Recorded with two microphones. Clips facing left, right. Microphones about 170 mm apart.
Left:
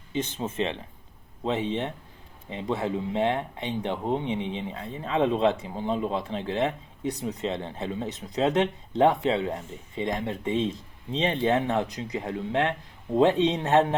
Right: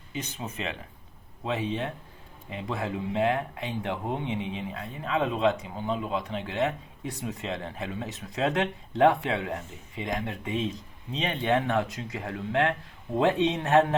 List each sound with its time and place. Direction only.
0.2 s speech: 25° left (ahead or behind)